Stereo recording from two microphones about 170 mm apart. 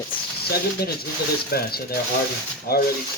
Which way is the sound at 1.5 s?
65° left (ahead or behind).